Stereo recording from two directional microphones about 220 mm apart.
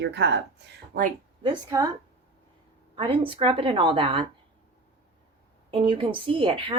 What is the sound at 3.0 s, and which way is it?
A woman's voice, 25° right (ahead or behind).